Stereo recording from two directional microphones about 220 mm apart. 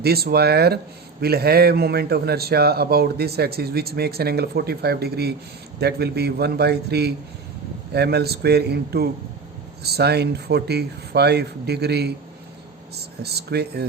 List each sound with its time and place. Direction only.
0.0 s a man's voice: 45° right (ahead or behind)